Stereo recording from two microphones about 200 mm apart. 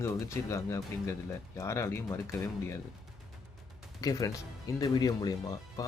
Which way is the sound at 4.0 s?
15° left (ahead or behind).